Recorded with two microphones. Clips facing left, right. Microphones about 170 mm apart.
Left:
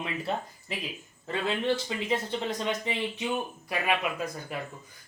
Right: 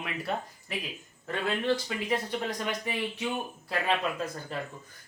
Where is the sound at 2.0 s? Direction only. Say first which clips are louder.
Left 1 dB; 25° left (ahead or behind).